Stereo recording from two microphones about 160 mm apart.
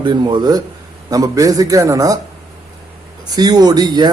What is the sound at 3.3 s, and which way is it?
Speech, 25° right (ahead or behind).